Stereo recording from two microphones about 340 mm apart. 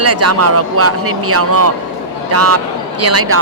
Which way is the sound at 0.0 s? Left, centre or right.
Right.